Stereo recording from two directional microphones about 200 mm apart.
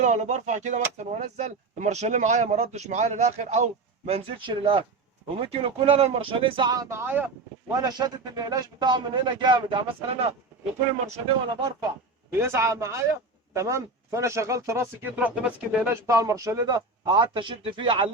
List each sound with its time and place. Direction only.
0.0 s a man's voice: 40° right (ahead or behind); by 11.9 s 20° right (ahead or behind)
12.3 s speech: 10° right (ahead or behind)